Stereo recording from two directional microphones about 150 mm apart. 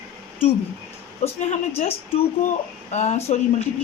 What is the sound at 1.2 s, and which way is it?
Speech, 45° left (ahead or behind).